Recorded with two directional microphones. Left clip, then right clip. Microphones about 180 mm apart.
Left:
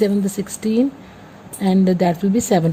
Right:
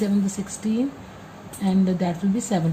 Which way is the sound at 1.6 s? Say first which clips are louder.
Left 7 dB; 50° left (ahead or behind).